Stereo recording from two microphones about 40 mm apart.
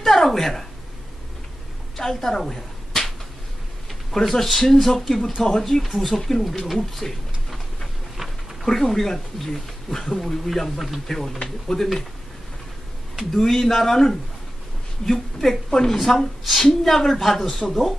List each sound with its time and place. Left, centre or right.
0.0 s speech: centre
2.0 s a sound: centre
4.1 s speech: centre
13.2 s speech: centre
15.7 s speech: centre
16.0 s a woman's voice: centre